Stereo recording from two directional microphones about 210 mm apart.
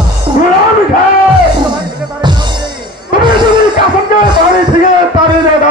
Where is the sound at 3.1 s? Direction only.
20° right (ahead or behind).